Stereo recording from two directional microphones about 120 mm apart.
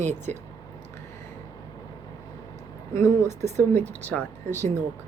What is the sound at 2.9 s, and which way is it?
A woman's voice, 20° left (ahead or behind).